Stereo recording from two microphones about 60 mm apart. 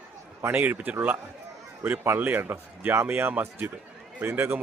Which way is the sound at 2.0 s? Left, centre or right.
Right.